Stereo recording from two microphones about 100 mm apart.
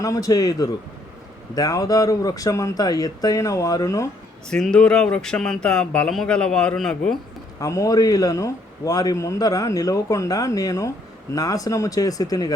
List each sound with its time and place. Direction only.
0.0 s a man's voice: 35° left (ahead or behind)
4.6 s speech: 10° left (ahead or behind)
7.6 s a man's voice: 35° left (ahead or behind)